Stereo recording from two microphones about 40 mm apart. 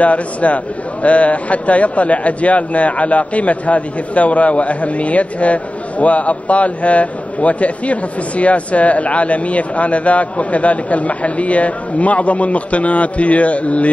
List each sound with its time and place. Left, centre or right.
0.0 s a man's voice: left